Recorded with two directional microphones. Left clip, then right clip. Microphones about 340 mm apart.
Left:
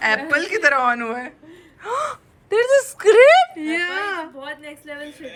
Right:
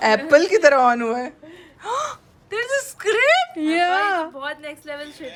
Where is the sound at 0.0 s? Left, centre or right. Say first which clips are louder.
Right 4 dB; centre.